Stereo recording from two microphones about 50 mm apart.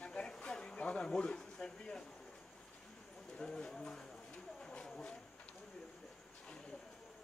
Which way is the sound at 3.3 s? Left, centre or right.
Centre.